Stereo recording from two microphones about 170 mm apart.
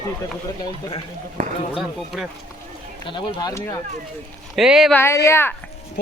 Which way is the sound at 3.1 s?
30° left (ahead or behind).